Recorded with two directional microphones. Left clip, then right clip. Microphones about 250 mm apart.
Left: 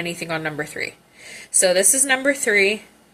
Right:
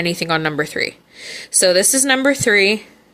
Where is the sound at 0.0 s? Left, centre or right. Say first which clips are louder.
Right 7 dB; right.